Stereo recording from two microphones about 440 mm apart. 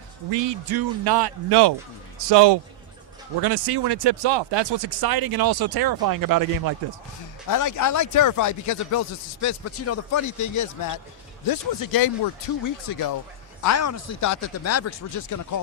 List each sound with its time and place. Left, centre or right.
0.3 s speech: right
7.4 s speech: left
13.6 s speech: left